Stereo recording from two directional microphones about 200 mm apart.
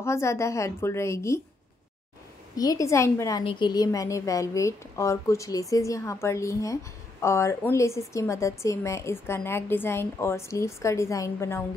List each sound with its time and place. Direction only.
0.0 s a woman's voice: 15° left (ahead or behind)
2.5 s a woman's voice: 20° left (ahead or behind)